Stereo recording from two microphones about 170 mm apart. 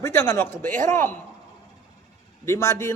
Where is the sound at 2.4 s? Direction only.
15° left (ahead or behind).